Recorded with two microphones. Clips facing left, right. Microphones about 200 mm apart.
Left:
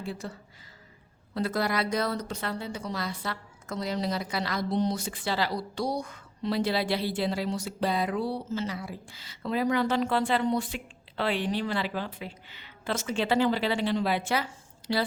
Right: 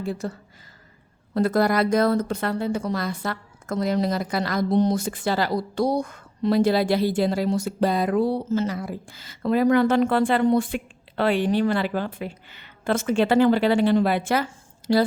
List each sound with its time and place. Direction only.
0.0 s speech: 45° right (ahead or behind)